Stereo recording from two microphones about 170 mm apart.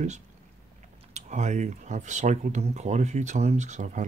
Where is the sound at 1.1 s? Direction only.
45° right (ahead or behind).